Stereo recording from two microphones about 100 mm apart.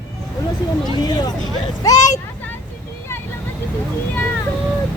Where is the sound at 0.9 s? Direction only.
40° left (ahead or behind).